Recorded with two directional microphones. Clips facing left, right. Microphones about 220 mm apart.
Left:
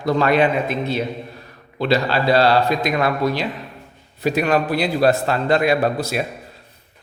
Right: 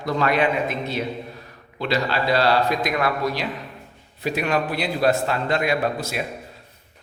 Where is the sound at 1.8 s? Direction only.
35° left (ahead or behind).